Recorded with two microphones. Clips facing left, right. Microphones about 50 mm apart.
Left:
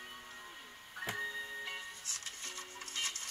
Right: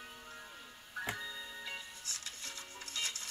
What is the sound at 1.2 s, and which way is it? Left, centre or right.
Music, left.